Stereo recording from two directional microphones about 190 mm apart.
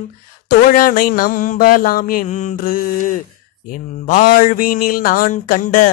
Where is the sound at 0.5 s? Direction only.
50° left (ahead or behind).